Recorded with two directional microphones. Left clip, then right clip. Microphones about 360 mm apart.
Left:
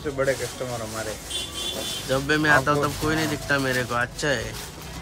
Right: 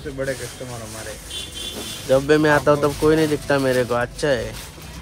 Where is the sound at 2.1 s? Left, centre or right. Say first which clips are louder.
Right 5 dB; centre.